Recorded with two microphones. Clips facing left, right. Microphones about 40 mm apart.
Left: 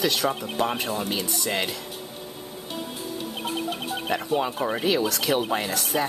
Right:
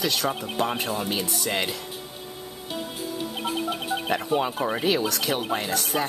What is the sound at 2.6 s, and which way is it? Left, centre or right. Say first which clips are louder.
Music: right 2 dB; right.